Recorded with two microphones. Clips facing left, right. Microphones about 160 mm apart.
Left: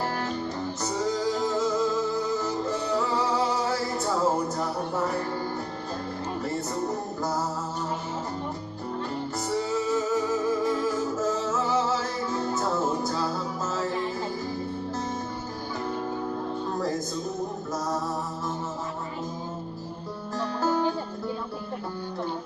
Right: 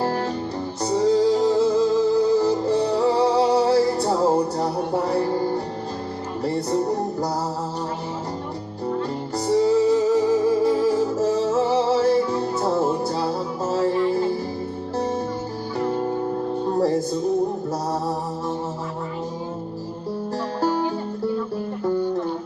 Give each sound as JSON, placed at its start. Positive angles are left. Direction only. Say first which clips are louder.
{"t": 0.0, "sound": "music", "louder": "right 6 dB", "side_deg": -30}
{"t": 6.4, "sound": "music", "louder": "right 10 dB", "side_deg": -35}
{"t": 9.5, "sound": "music", "louder": "right 10 dB", "side_deg": -35}
{"t": 20.6, "sound": "music", "louder": "right 2 dB", "side_deg": -35}